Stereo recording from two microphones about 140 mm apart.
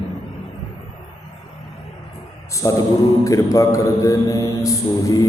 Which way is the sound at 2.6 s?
25° left (ahead or behind).